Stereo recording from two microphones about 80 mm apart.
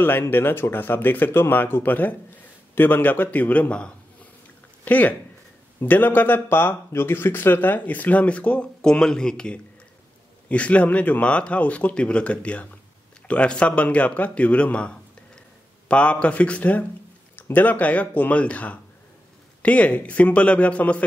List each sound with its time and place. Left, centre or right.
0.0 s speech: left